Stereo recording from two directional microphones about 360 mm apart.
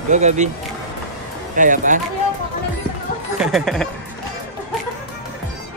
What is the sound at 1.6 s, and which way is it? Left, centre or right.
Speech, right.